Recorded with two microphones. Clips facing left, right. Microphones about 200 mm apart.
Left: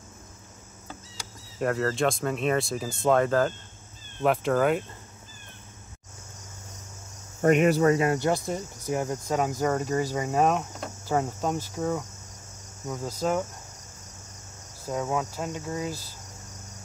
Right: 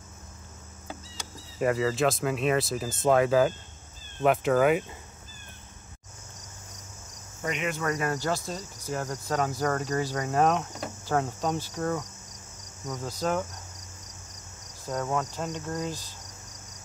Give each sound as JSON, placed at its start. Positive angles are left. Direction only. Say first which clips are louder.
{"t": 1.6, "sound": "speech", "louder": "right 1 dB", "side_deg": -5}
{"t": 7.4, "sound": "speech", "louder": "left 11 dB", "side_deg": 55}
{"t": 7.7, "sound": "speech", "louder": "left 7 dB", "side_deg": 30}
{"t": 8.8, "sound": "speech", "louder": "left 3 dB", "side_deg": 10}
{"t": 14.9, "sound": "speech", "louder": "left 1 dB", "side_deg": 5}